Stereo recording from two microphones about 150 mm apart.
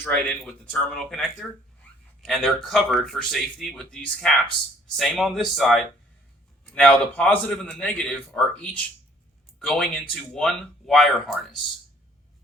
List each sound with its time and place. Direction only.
0.0 s a man's voice: 5° left (ahead or behind)